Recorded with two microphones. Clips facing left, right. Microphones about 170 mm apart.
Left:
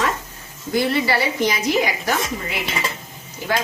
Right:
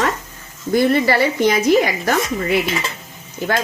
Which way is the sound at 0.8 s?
50° right (ahead or behind).